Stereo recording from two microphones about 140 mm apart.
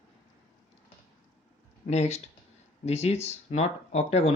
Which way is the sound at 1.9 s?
50° left (ahead or behind).